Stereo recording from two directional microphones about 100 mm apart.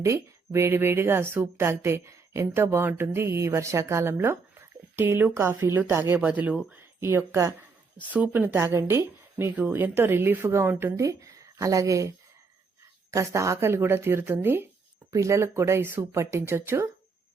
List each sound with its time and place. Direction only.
0.0 s a woman's voice: 30° right (ahead or behind)
7.9 s a woman's voice: 15° right (ahead or behind)